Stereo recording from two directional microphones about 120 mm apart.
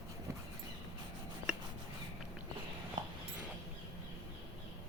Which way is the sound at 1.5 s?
10° right (ahead or behind).